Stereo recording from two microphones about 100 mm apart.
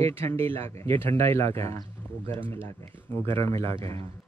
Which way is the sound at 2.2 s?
70° right (ahead or behind).